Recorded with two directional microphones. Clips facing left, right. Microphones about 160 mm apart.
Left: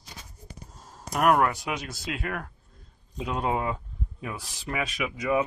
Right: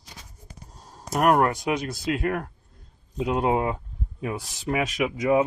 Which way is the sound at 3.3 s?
15° right (ahead or behind).